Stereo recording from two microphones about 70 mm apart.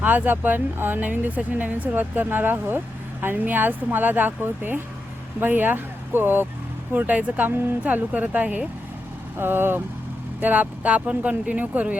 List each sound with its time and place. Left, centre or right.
0.0 s speech: right
9.4 s speech: right